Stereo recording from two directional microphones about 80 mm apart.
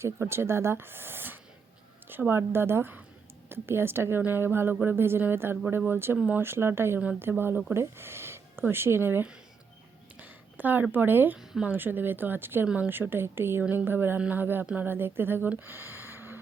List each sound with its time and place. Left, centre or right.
0.0 s speech: right
10.2 s a sound: right
10.9 s speech: right
12.6 s a woman's voice: centre
12.9 s speech: right
15.4 s a sound: right